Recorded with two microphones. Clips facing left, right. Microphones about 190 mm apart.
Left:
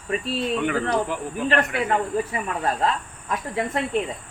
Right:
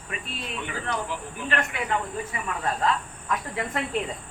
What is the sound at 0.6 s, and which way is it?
Speech, 55° left (ahead or behind).